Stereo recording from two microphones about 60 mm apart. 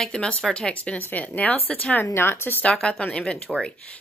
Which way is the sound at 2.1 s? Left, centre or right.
Left.